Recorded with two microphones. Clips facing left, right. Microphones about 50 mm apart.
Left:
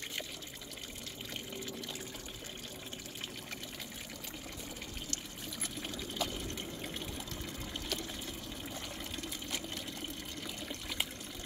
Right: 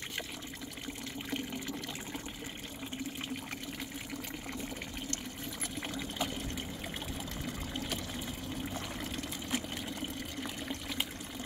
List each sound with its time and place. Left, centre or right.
5.8 s pour: centre
7.4 s pour: centre
8.7 s water: right
10.4 s water: centre